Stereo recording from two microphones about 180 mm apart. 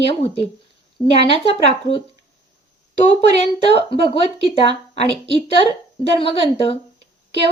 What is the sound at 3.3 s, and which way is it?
A woman's voice, 35° left (ahead or behind).